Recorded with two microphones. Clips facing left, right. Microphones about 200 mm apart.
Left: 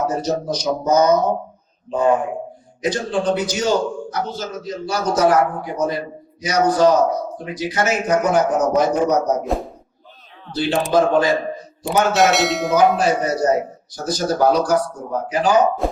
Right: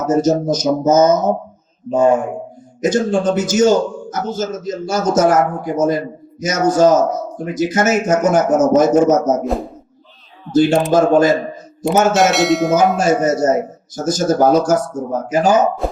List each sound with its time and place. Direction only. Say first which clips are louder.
0.0 s a man's voice: right 6 dB; 45° right (ahead or behind)
10.5 s speech: right 5 dB; 45° right (ahead or behind)
12.1 s speech: right 3 dB; centre (ahead or behind)
13.0 s a man's voice: right 4 dB; 45° right (ahead or behind)